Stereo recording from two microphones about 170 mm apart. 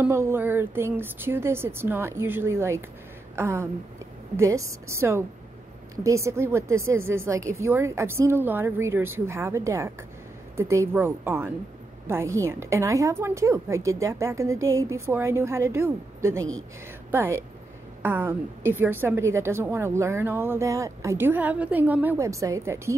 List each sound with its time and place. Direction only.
0.0 s a woman's voice: 15° right (ahead or behind)